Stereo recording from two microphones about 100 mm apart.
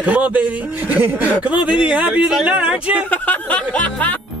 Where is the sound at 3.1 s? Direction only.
15° left (ahead or behind).